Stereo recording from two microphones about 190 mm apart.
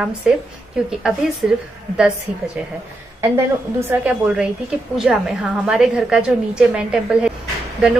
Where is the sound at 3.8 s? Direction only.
10° right (ahead or behind).